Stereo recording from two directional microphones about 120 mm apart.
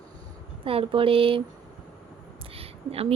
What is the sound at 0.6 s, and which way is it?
Speech, 50° right (ahead or behind).